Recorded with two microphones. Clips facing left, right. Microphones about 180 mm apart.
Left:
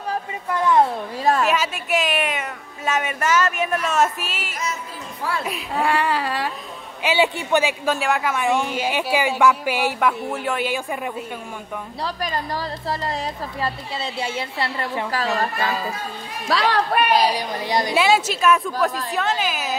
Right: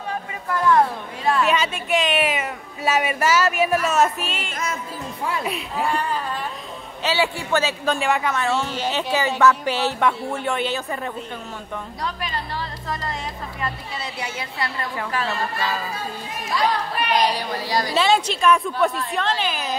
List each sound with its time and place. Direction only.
0.5 s a sound: 20° left (ahead or behind)
1.4 s speech: centre (ahead or behind)
5.8 s speech: 85° left
7.0 s a man's voice: 15° left (ahead or behind)
12.0 s a woman's voice: 35° left (ahead or behind)
16.4 s speech: 85° left
17.2 s speech: 15° left (ahead or behind)
17.9 s speech: 5° left (ahead or behind)